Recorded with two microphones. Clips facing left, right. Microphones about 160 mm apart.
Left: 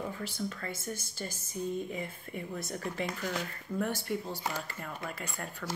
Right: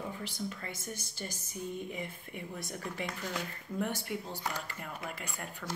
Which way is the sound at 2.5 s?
10° right (ahead or behind).